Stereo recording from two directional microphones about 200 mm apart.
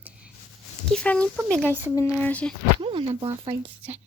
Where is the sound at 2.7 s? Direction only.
25° right (ahead or behind).